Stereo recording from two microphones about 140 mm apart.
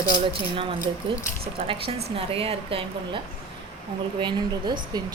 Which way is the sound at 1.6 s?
40° right (ahead or behind).